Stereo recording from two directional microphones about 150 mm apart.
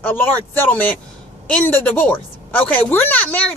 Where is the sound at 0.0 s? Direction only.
10° left (ahead or behind).